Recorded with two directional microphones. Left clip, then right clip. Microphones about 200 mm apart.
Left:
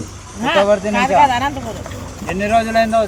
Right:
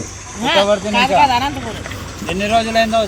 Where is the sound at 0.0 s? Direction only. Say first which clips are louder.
Right 3 dB; 60° left (ahead or behind).